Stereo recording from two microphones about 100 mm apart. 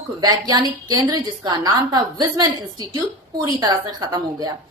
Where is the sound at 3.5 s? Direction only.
45° right (ahead or behind).